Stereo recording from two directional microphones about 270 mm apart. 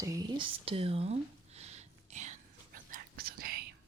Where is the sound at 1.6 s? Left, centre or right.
Right.